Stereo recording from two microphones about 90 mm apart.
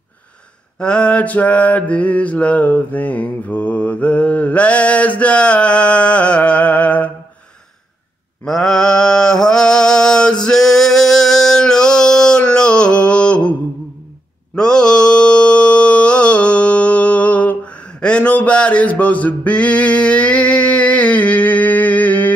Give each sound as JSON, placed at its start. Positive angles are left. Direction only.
{"t": 0.7, "sound": "mantra", "side_deg": 10}
{"t": 8.5, "sound": "mantra", "side_deg": 5}